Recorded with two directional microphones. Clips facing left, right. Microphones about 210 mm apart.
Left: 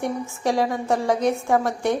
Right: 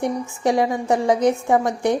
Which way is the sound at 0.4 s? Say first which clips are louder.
Right 3 dB; 15° right (ahead or behind).